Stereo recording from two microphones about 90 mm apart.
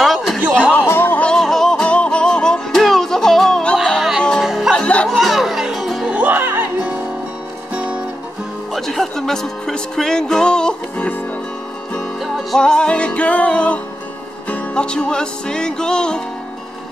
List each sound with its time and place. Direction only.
0.0 s a sound: centre (ahead or behind)
0.4 s a sound: 20° right (ahead or behind)
0.7 s music: 20° left (ahead or behind)
4.5 s music: 5° right (ahead or behind)
4.7 s music: 10° left (ahead or behind)
6.1 s music: 15° right (ahead or behind)
8.7 s music: centre (ahead or behind)
12.4 s music: 10° left (ahead or behind)